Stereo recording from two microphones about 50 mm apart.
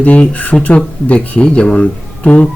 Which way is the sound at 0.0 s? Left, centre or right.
Left.